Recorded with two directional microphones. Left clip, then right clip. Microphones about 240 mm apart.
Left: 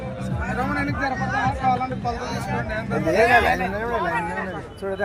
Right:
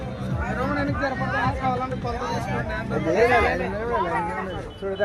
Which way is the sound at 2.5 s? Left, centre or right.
Left.